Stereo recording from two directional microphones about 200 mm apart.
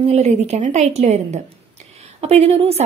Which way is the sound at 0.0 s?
30° right (ahead or behind).